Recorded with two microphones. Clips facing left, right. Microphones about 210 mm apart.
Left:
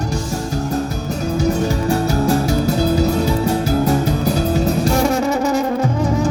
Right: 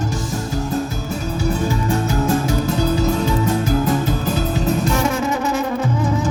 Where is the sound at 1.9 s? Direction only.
35° left (ahead or behind).